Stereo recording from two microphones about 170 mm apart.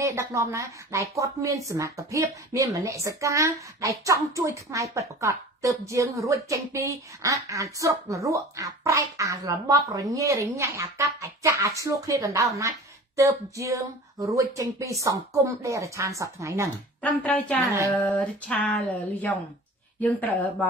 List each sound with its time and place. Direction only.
0.0 s a woman's voice: 15° right (ahead or behind)
17.0 s music: 10° left (ahead or behind)